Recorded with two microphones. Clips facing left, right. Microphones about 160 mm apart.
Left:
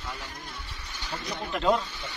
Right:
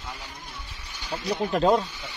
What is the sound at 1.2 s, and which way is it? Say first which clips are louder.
Speech: right 5 dB; 40° right (ahead or behind).